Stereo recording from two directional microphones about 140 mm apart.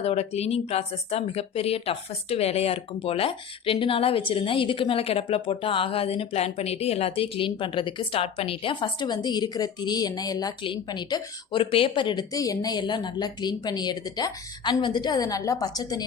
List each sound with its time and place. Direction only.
0.0 s speech: 50° left (ahead or behind); by 16.0 s 30° left (ahead or behind)